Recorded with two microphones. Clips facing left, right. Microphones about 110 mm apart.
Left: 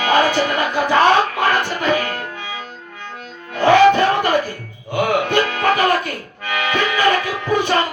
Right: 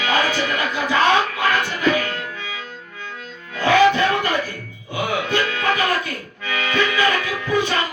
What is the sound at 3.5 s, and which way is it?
Music, 45° left (ahead or behind).